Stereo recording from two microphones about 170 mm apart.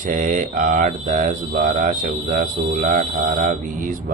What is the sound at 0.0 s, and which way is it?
Mantra, 50° right (ahead or behind).